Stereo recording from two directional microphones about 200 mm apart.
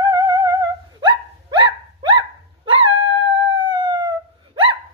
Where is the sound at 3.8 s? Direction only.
20° right (ahead or behind).